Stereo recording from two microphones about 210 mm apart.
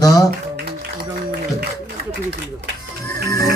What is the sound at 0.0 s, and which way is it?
Speech, 20° left (ahead or behind).